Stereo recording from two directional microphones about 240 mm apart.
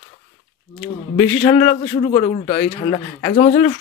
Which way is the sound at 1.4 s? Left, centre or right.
Centre.